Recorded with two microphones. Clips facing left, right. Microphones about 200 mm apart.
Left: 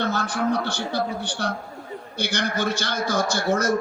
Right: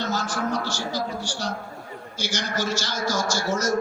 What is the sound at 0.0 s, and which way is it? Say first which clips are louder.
A man's voice: left 3 dB; 60° left (ahead or behind).